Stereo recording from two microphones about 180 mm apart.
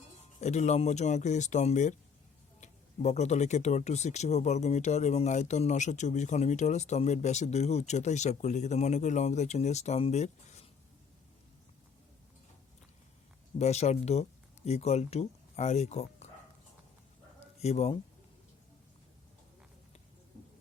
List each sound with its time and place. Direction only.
0.3 s speech: 40° left (ahead or behind)
13.6 s speech: 35° left (ahead or behind)
17.6 s speech: 35° left (ahead or behind)